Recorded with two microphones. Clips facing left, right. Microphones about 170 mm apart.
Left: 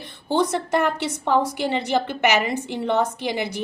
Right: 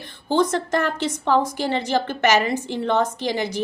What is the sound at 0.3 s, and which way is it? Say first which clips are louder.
A woman's voice: right 1 dB; 15° left (ahead or behind).